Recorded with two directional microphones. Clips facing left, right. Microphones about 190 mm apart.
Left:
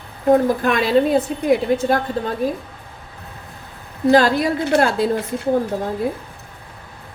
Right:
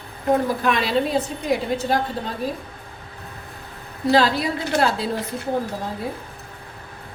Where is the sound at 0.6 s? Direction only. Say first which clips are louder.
Left 5 dB; 50° left (ahead or behind).